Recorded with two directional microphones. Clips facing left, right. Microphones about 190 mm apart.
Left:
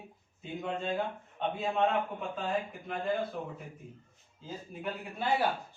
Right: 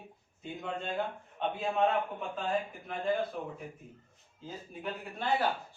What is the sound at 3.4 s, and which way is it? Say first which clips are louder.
Speech: even; centre (ahead or behind).